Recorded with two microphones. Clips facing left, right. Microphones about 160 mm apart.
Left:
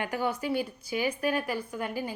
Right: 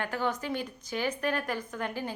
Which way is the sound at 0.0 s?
10° left (ahead or behind).